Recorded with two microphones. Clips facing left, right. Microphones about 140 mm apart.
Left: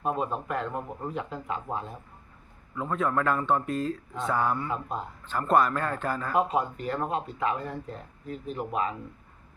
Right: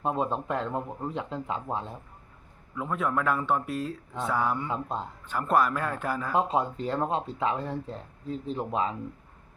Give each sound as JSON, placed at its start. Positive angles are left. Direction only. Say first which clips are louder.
{"t": 0.0, "sound": "speech", "louder": "right 1 dB", "side_deg": -25}
{"t": 2.7, "sound": "a man's voice", "louder": "left 1 dB", "side_deg": -5}
{"t": 6.3, "sound": "speech", "louder": "even", "side_deg": -25}